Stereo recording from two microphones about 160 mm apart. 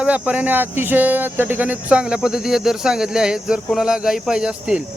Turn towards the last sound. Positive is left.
turn(degrees=-5)  # may be behind; listen again after turning